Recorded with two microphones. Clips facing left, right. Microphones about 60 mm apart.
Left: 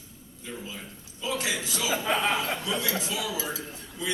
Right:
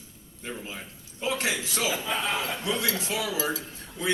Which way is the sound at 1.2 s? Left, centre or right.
Right.